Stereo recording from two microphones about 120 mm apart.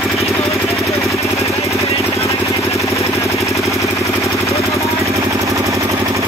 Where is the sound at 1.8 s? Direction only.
60° left (ahead or behind).